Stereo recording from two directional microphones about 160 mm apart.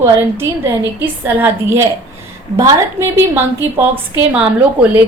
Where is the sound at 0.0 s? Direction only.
15° right (ahead or behind).